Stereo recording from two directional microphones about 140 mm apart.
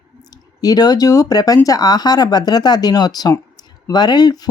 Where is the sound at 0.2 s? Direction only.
25° left (ahead or behind).